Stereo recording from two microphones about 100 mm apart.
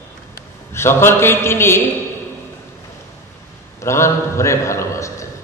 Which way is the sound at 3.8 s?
30° left (ahead or behind).